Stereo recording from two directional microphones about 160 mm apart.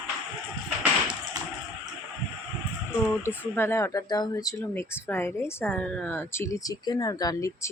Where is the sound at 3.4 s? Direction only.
15° left (ahead or behind).